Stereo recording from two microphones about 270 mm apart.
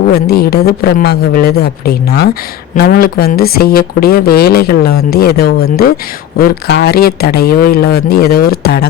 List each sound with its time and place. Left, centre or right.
0.1 s speech: left